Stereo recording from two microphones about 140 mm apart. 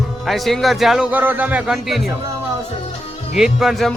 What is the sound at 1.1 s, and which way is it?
Speech, 10° right (ahead or behind).